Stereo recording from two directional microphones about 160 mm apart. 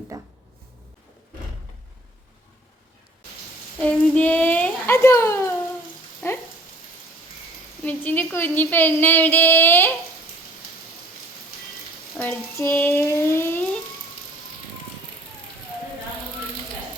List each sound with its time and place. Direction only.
0.1 s speech: 20° right (ahead or behind)
3.8 s speech: 5° left (ahead or behind)
6.2 s a sound: 5° left (ahead or behind)
7.9 s a woman's voice: 10° left (ahead or behind)
12.2 s a woman's voice: 15° left (ahead or behind)